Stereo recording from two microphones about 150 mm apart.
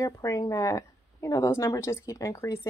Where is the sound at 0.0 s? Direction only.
20° left (ahead or behind).